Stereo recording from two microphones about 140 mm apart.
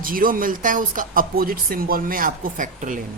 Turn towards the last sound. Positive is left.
turn(degrees=-65)  # may be behind; listen again after turning